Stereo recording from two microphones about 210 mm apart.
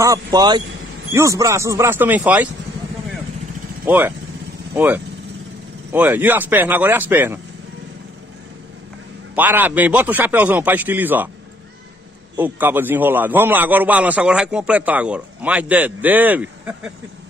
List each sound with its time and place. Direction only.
0.0 s a man's voice: 15° right (ahead or behind)
3.8 s a man's voice: 10° right (ahead or behind)
9.3 s a man's voice: 10° right (ahead or behind)
12.4 s a man's voice: 10° right (ahead or behind)